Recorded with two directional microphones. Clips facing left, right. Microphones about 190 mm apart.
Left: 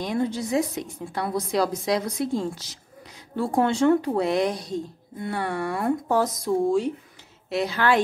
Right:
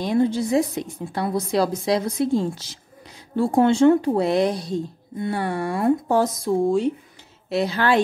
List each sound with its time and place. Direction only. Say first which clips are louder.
0.0 s a woman's voice: right 5 dB; 30° right (ahead or behind)